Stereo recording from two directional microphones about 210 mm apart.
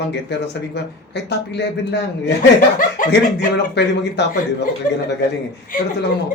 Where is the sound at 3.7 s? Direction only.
55° left (ahead or behind).